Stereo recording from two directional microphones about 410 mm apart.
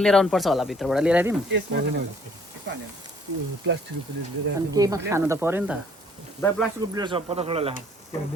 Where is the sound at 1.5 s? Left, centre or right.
Right.